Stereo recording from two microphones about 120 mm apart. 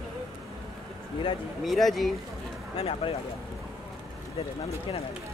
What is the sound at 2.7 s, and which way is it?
Speech, 50° left (ahead or behind).